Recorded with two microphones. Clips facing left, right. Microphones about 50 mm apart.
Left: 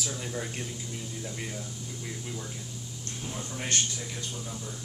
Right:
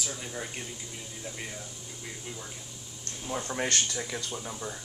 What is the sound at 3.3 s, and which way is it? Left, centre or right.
Speech, right.